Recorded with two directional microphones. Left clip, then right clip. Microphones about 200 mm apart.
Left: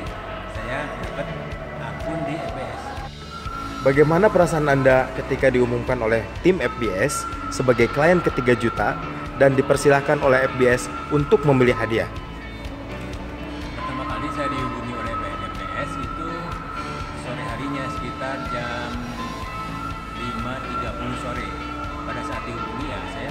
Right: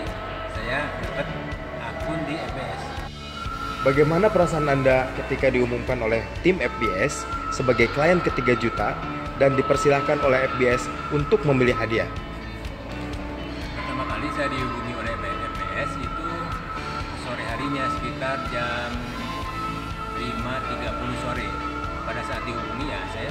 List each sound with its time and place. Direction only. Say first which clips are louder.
4.0 s speech: left 4 dB; 15° left (ahead or behind)